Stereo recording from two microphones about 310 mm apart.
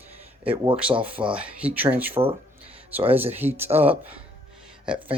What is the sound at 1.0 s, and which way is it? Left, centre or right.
Speech, centre.